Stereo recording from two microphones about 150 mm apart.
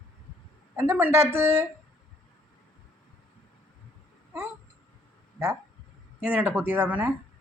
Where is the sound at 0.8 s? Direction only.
15° right (ahead or behind).